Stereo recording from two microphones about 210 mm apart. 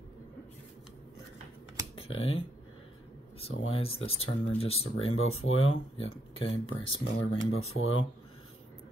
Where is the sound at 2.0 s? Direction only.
25° left (ahead or behind).